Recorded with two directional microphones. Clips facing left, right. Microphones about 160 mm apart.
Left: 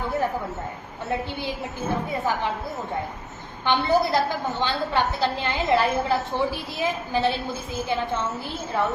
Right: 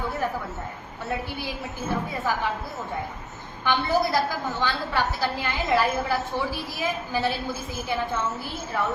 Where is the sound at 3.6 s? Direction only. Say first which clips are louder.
Left 2 dB; 20° left (ahead or behind).